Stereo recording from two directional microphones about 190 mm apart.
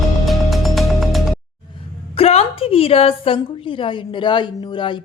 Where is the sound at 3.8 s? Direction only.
25° left (ahead or behind).